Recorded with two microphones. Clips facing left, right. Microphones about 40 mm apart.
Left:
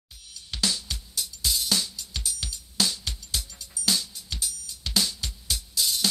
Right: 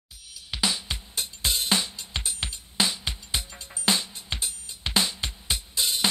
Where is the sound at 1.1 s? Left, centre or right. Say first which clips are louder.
Right 1 dB; right.